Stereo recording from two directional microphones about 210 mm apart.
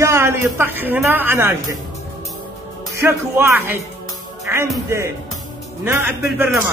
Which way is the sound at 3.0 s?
15° right (ahead or behind).